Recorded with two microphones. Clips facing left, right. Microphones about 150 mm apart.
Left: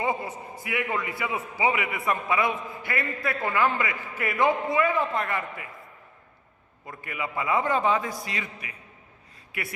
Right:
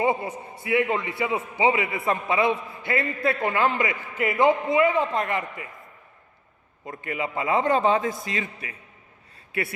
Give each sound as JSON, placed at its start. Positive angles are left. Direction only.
{"t": 0.0, "sound": "a man's voice", "side_deg": -25}
{"t": 7.0, "sound": "a man's voice", "side_deg": -25}